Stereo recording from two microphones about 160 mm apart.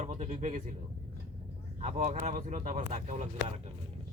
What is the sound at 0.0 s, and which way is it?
Speech, 45° right (ahead or behind).